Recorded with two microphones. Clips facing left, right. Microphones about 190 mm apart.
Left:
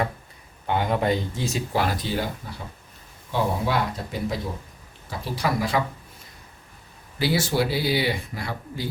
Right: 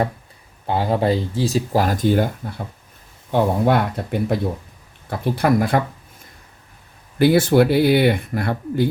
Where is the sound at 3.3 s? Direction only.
55° right (ahead or behind).